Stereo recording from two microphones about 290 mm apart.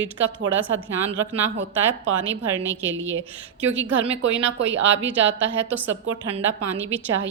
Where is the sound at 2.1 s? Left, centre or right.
Right.